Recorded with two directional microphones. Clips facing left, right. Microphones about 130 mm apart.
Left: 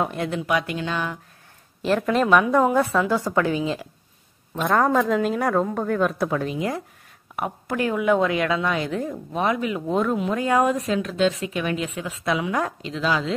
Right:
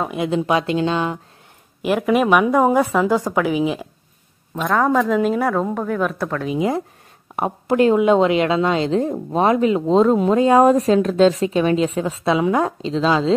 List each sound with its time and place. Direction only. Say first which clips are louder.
0.3 s speech: right 6 dB; 25° right (ahead or behind)
1.8 s a woman's voice: right 3 dB; 10° right (ahead or behind)
4.6 s speech: right 2 dB; centre (ahead or behind)
6.5 s speech: right 6 dB; 20° right (ahead or behind)